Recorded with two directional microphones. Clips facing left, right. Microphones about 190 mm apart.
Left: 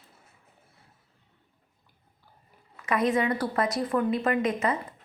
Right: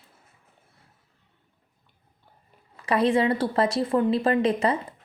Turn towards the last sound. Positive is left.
turn(degrees=-30)  # may be behind; listen again after turning